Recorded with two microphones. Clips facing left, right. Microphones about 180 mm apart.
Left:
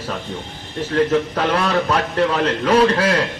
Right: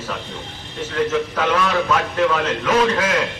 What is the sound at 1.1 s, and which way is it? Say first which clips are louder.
A man's voice: left 2 dB; 35° left (ahead or behind).